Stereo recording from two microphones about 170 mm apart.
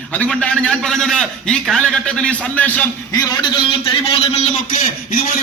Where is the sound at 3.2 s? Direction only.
30° left (ahead or behind).